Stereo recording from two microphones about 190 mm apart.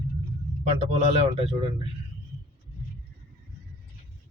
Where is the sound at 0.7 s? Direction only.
35° right (ahead or behind).